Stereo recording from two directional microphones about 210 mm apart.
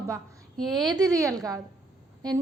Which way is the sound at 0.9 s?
15° right (ahead or behind).